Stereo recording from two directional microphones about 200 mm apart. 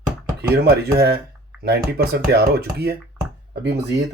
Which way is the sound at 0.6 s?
55° right (ahead or behind).